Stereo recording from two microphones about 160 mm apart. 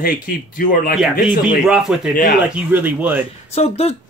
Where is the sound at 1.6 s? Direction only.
5° right (ahead or behind).